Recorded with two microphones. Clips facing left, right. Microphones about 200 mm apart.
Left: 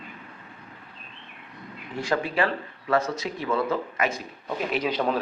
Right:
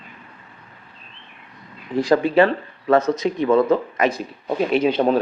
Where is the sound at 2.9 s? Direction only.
20° right (ahead or behind).